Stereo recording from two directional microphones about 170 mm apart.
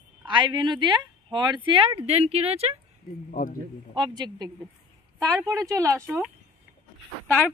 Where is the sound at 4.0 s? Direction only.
25° right (ahead or behind).